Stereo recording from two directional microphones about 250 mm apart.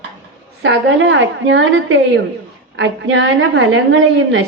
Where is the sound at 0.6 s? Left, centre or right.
Right.